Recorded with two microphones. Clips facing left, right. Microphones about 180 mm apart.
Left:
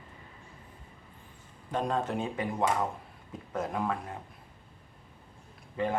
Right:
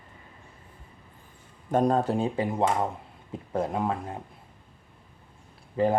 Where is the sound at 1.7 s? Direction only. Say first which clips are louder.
Right 7 dB; 45° right (ahead or behind); by 4.1 s 25° right (ahead or behind).